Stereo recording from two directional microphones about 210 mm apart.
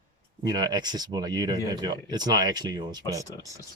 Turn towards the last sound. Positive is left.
turn(degrees=-20)  # may be behind; listen again after turning